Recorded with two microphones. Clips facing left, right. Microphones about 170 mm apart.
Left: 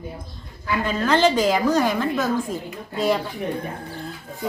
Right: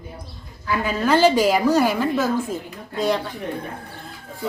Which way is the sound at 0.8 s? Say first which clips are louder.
Right 2 dB; 10° right (ahead or behind).